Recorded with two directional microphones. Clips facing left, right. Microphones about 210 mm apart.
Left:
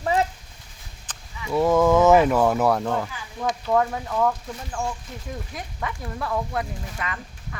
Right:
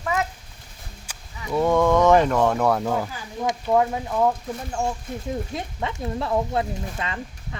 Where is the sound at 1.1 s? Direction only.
10° right (ahead or behind).